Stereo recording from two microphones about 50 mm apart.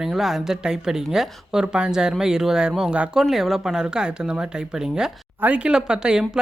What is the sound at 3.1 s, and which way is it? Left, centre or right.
Speech, centre.